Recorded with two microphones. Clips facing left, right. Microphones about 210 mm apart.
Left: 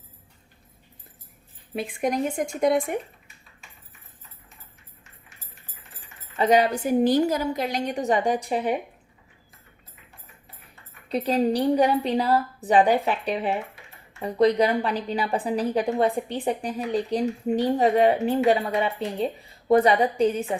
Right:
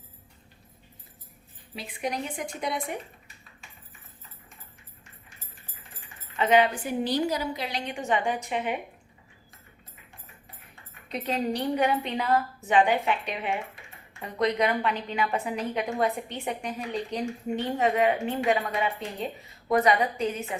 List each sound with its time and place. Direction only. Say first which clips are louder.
1.7 s speech: left 7 dB; 50° left (ahead or behind)
6.3 s a woman's voice: left 2 dB; 40° left (ahead or behind)
11.1 s a woman's voice: left 6 dB; 35° left (ahead or behind)